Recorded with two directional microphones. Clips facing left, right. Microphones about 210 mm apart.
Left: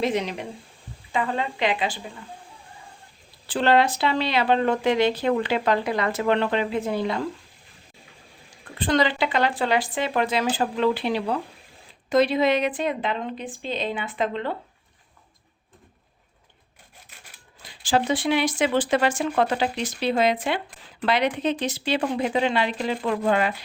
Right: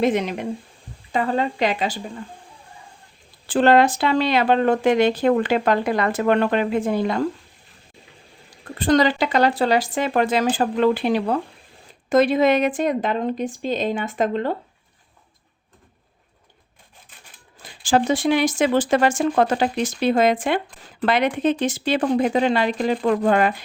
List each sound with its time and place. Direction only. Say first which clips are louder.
0.0 s speech: right 4 dB; 50° right (ahead or behind)
1.1 s a woman's voice: right 4 dB; 40° right (ahead or behind)
3.5 s speech: right 5 dB; 50° right (ahead or behind)
8.6 s speech: right 5 dB; 45° right (ahead or behind)
17.6 s speech: right 4 dB; 45° right (ahead or behind)